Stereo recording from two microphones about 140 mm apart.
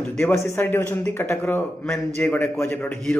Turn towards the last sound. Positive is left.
turn(degrees=15)  # may be behind; listen again after turning